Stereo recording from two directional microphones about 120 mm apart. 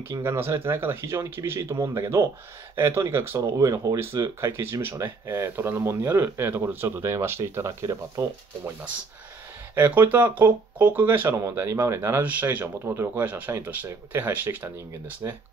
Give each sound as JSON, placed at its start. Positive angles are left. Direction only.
{"t": 0.1, "sound": "speech", "side_deg": -25}
{"t": 9.8, "sound": "speech", "side_deg": -15}